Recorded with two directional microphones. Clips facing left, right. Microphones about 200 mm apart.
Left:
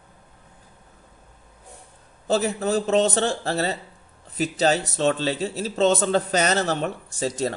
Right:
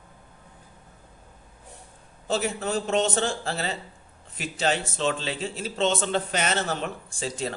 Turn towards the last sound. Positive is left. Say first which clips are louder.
# left 5 dB
turn(degrees=40)  # may be behind; listen again after turning